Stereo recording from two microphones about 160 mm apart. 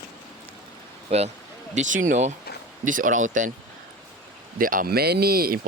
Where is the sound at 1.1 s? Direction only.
40° right (ahead or behind).